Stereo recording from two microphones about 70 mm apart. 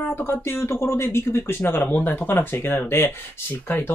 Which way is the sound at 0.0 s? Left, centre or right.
Left.